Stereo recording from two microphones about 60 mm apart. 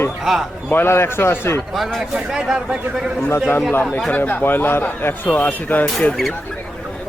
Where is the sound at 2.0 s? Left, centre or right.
Centre.